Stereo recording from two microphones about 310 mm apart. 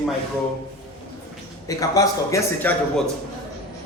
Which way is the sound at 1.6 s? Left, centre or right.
Centre.